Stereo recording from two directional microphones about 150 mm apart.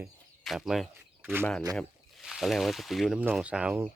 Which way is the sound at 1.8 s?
Centre (ahead or behind).